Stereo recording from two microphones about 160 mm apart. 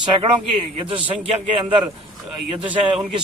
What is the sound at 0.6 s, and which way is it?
A man's voice, 35° right (ahead or behind).